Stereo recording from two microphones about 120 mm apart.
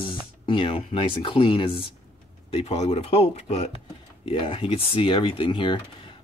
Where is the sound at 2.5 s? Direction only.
60° left (ahead or behind).